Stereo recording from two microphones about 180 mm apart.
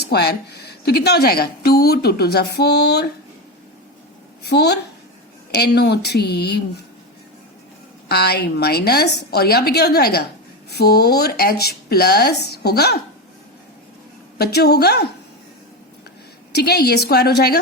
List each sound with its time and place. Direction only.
0.1 s a woman's voice: 65° left (ahead or behind)
4.4 s a woman's voice: 65° left (ahead or behind)
8.0 s a woman's voice: 60° left (ahead or behind)
14.3 s a woman's voice: 60° left (ahead or behind)
16.5 s a woman's voice: 65° left (ahead or behind)